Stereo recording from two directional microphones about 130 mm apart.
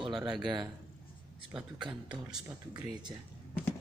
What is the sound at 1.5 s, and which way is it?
Speech, 5° right (ahead or behind).